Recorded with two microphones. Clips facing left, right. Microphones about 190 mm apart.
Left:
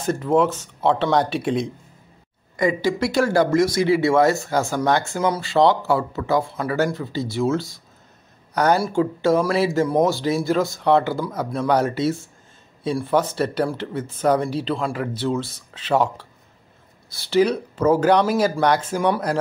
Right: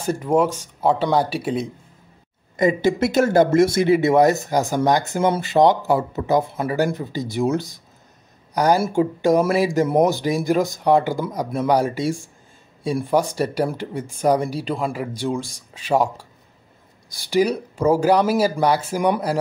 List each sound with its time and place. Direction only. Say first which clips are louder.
0.0 s speech: even; 10° right (ahead or behind)
2.5 s speech: right 2 dB; 25° right (ahead or behind)
8.8 s speech: right 1 dB; 20° right (ahead or behind)